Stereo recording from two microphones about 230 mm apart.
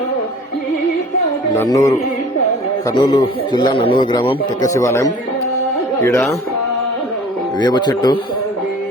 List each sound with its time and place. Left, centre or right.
1.5 s a man's voice: centre
7.6 s speech: centre